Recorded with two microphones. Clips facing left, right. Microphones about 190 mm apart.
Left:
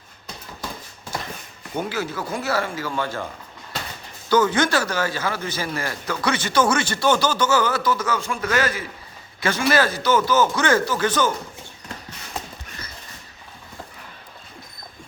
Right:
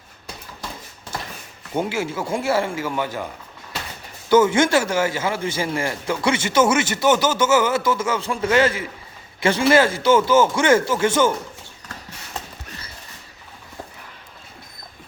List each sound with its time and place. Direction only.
1.7 s a man's voice: 25° right (ahead or behind)
4.3 s a man's voice: 25° right (ahead or behind)